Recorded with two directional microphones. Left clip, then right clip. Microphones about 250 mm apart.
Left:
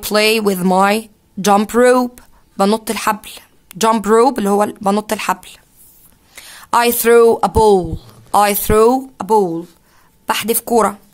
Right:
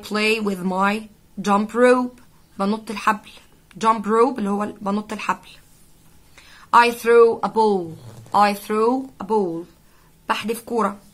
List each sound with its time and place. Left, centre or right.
0.0 s speech: left